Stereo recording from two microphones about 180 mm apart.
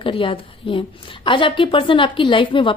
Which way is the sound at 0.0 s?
30° left (ahead or behind).